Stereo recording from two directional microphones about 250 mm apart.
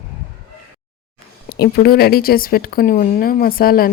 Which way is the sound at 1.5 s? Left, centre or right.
Left.